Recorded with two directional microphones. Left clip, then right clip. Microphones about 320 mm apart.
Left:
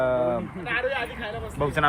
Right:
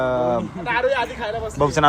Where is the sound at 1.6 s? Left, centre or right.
Centre.